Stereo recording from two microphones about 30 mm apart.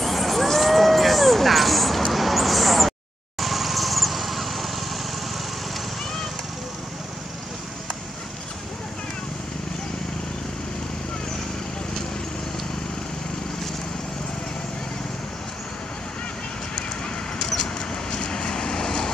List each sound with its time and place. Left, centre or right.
0.0 s a sound: centre
2.1 s mouse: centre
3.3 s vehicle: centre
18.1 s vehicle: left